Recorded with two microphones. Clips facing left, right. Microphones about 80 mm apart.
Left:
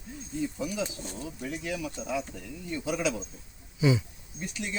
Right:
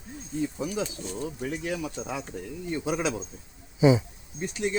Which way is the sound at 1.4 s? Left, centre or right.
Right.